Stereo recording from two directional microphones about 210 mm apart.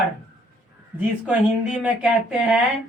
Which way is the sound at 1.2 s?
5° right (ahead or behind).